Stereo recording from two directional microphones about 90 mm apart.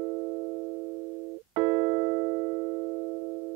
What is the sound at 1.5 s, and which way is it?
Keyboard, 35° right (ahead or behind).